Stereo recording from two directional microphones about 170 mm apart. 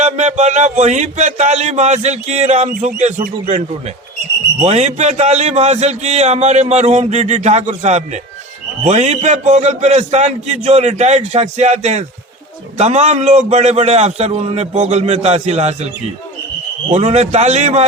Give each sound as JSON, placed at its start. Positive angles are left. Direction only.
{"t": 0.0, "sound": "speech", "side_deg": -45}
{"t": 4.6, "sound": "a man's voice", "side_deg": -40}